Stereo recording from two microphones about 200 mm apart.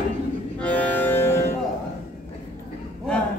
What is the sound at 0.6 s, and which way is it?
Music, 5° left (ahead or behind).